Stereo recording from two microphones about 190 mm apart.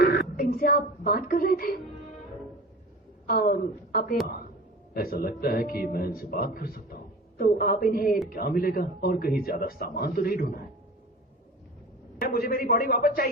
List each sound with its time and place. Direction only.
0.0 s speech: 50° left (ahead or behind)
3.2 s a man's voice: 50° left (ahead or behind)
12.3 s a man's voice: 50° left (ahead or behind)